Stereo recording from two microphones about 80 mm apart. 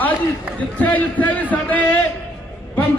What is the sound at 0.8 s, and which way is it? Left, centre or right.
A man's voice, centre.